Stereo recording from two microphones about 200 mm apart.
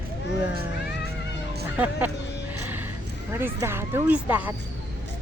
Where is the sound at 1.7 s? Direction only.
10° right (ahead or behind).